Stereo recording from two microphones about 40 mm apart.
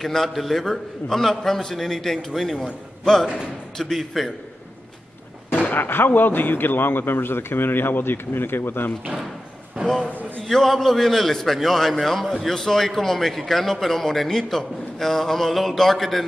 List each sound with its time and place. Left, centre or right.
0.0 s a man's voice: centre
3.7 s a man's voice: centre
5.5 s speech: left
9.8 s a man's voice: right
10.4 s a man's voice: centre